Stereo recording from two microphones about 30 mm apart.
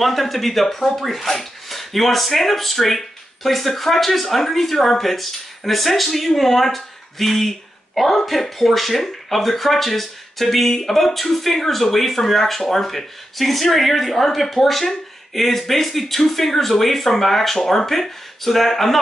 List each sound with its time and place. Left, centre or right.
0.0 s speech: centre